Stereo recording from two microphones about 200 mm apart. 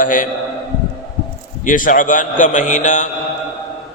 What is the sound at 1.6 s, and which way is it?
A man's voice, 40° left (ahead or behind).